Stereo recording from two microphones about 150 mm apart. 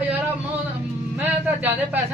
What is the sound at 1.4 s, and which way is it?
Speech, 10° right (ahead or behind).